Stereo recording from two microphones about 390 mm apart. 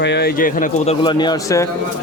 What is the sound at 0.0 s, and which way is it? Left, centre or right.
Speech, left.